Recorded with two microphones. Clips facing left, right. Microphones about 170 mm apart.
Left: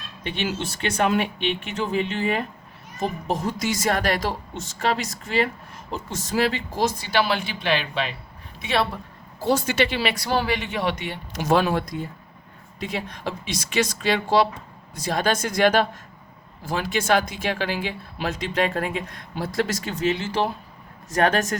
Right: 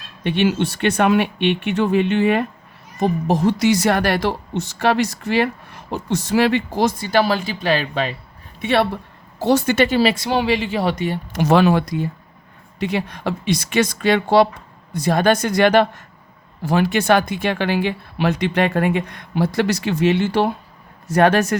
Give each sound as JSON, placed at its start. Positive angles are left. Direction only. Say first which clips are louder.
{"t": 0.3, "sound": "a woman's voice", "louder": "right 9 dB", "side_deg": -60}
{"t": 8.6, "sound": "speech", "louder": "right 6 dB", "side_deg": -60}
{"t": 9.4, "sound": "a woman's voice", "louder": "right 6 dB", "side_deg": -70}
{"t": 9.7, "sound": "speech", "louder": "right 7 dB", "side_deg": -45}
{"t": 10.2, "sound": "speech", "louder": "right 4 dB", "side_deg": -20}
{"t": 10.5, "sound": "speech", "louder": "right 5 dB", "side_deg": -30}
{"t": 11.3, "sound": "speech", "louder": "right 5 dB", "side_deg": -70}
{"t": 12.8, "sound": "speech", "louder": "right 7 dB", "side_deg": -65}